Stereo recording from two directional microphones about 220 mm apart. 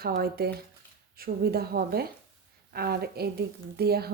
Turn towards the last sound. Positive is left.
turn(degrees=-45)  # may be behind; listen again after turning